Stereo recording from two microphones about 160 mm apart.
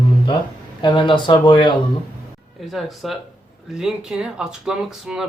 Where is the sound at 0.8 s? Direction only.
30° left (ahead or behind).